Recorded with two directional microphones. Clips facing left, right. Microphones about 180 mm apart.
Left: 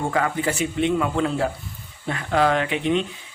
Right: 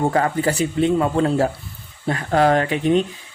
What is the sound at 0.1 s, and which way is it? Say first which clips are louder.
Speech: right 4 dB; 40° right (ahead or behind).